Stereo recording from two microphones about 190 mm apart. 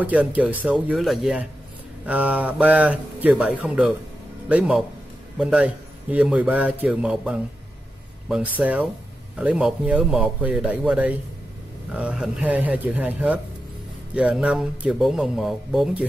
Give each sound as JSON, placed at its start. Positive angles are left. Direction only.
{"t": 0.0, "sound": "a man's voice", "side_deg": -5}